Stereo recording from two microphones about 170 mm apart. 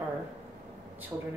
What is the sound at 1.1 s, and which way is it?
Speech, 20° right (ahead or behind).